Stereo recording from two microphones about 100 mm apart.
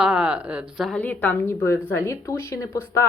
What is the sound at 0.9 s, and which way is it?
Speech, 15° left (ahead or behind).